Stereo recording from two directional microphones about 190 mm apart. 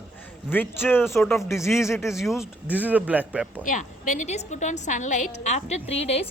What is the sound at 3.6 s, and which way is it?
A woman's voice, 40° left (ahead or behind).